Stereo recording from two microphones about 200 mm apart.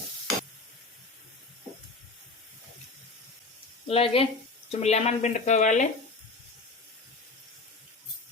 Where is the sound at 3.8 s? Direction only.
30° left (ahead or behind).